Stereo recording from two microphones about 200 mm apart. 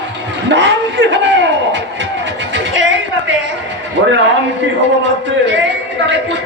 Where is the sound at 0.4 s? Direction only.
65° right (ahead or behind).